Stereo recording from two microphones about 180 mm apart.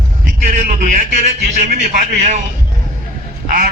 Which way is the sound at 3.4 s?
50° right (ahead or behind).